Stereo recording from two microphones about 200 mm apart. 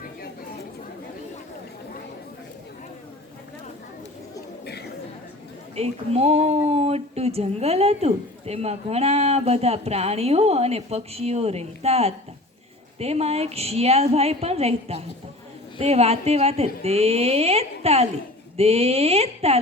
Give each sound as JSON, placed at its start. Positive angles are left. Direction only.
{"t": 5.7, "sound": "speech", "side_deg": -30}